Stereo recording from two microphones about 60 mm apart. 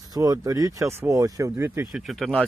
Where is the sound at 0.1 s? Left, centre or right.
Right.